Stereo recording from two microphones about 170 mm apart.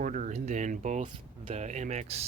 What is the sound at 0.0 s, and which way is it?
Speech, 45° right (ahead or behind).